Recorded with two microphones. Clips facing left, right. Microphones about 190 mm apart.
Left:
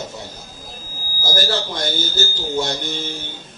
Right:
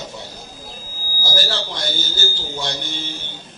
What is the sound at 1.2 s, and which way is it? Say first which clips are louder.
A man's voice: left 3 dB; 45° left (ahead or behind).